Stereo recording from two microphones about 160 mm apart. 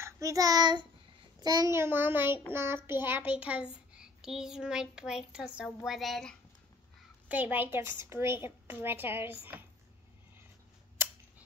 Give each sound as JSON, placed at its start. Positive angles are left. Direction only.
{"t": 0.0, "sound": "child singing", "side_deg": -20}
{"t": 1.4, "sound": "a woman's voice", "side_deg": -20}
{"t": 7.2, "sound": "a woman's voice", "side_deg": -10}